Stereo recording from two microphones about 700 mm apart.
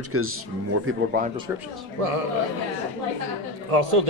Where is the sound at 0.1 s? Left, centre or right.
Centre.